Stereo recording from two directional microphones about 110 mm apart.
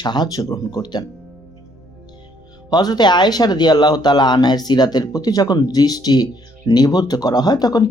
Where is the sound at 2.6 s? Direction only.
40° left (ahead or behind).